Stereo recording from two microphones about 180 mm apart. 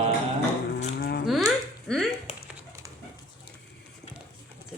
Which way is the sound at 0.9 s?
60° left (ahead or behind).